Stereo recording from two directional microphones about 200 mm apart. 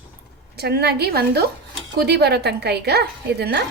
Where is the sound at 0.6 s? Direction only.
55° right (ahead or behind).